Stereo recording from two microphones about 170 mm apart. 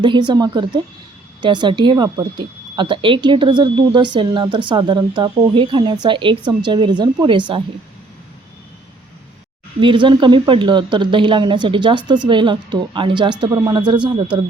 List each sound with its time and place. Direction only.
0.0 s speech: 25° right (ahead or behind)
9.8 s speech: 30° right (ahead or behind)